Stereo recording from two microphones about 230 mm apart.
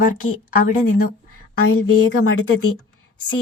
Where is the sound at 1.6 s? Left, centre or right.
Left.